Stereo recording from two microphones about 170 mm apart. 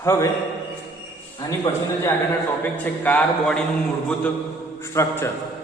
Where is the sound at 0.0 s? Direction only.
15° left (ahead or behind).